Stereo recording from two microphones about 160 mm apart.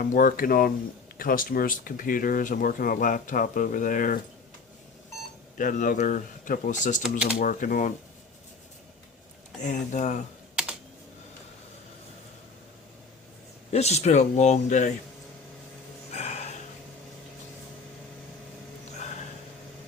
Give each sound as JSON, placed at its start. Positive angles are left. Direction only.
{"t": 0.0, "sound": "speech", "side_deg": 60}
{"t": 5.5, "sound": "speech", "side_deg": 55}
{"t": 7.0, "sound": "speech", "side_deg": -5}
{"t": 7.3, "sound": "speech", "side_deg": 60}
{"t": 9.6, "sound": "speech", "side_deg": 50}
{"t": 10.5, "sound": "computer keyboard", "side_deg": -5}
{"t": 13.7, "sound": "speech", "side_deg": 40}
{"t": 16.1, "sound": "a sound", "side_deg": 45}